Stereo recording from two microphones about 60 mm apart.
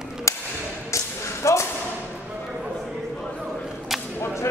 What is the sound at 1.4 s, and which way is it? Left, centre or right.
Thump, left.